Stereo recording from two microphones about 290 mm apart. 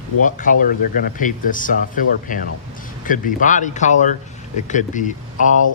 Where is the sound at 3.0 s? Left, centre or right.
Left.